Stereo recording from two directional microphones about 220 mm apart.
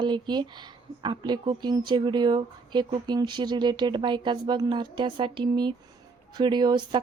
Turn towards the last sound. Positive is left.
turn(degrees=-20)  # may be behind; listen again after turning